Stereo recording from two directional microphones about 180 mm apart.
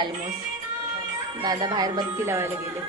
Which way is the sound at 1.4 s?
25° right (ahead or behind).